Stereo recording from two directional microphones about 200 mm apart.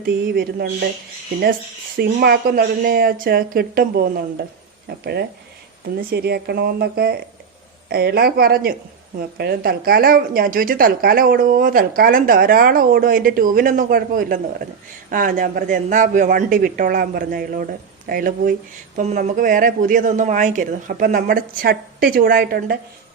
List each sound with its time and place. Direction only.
0.0 s a woman's voice: 50° right (ahead or behind)
2.0 s a woman's voice: 50° right (ahead or behind)
6.0 s a woman's voice: 50° right (ahead or behind)